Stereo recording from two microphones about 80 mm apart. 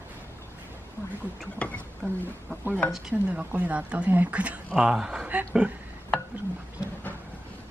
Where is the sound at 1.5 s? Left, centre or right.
Centre.